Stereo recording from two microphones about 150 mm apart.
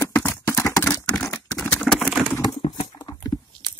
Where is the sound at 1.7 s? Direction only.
5° left (ahead or behind).